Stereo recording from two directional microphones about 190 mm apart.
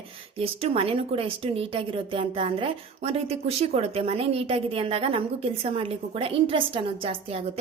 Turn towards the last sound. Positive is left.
turn(degrees=-30)  # may be behind; listen again after turning